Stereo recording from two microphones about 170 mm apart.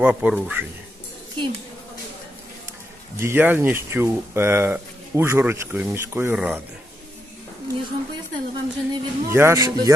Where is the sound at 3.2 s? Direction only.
15° right (ahead or behind).